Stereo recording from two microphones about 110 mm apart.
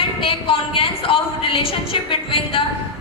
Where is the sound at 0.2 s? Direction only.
55° left (ahead or behind).